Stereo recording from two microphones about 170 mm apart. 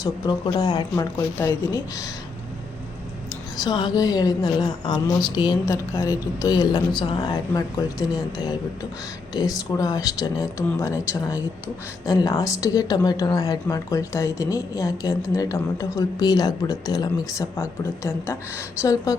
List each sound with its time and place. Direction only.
0.0 s a woman's voice: 25° left (ahead or behind)
3.6 s a woman's voice: 25° left (ahead or behind)